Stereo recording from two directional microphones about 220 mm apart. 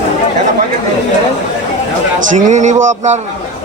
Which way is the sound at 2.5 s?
35° right (ahead or behind).